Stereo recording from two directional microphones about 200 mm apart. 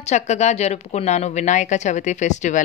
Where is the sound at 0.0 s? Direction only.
35° left (ahead or behind).